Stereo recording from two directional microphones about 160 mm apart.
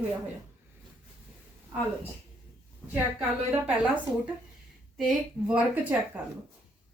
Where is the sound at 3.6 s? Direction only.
10° right (ahead or behind).